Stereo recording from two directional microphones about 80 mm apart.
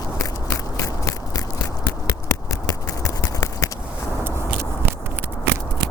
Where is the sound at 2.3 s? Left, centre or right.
Left.